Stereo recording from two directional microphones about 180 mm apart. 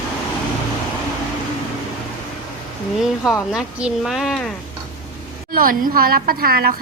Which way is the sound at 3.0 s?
5° right (ahead or behind).